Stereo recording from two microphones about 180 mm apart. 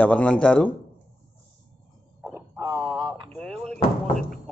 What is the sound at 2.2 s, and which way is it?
Bow-wow, 15° right (ahead or behind).